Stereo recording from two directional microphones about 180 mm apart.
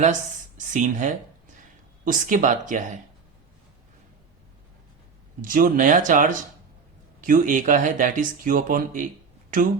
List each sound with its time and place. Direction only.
0.0 s speech: 45° right (ahead or behind)
5.4 s speech: 50° right (ahead or behind)